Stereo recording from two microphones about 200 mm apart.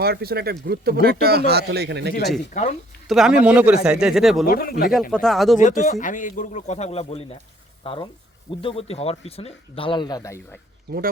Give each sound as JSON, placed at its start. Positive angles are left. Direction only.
{"t": 0.0, "sound": "a man's voice", "side_deg": -50}
{"t": 2.5, "sound": "speech", "side_deg": 35}
{"t": 3.1, "sound": "speech", "side_deg": 0}
{"t": 4.4, "sound": "speech", "side_deg": 45}
{"t": 5.1, "sound": "speech", "side_deg": 0}
{"t": 5.5, "sound": "speech", "side_deg": 40}
{"t": 10.9, "sound": "speech", "side_deg": -55}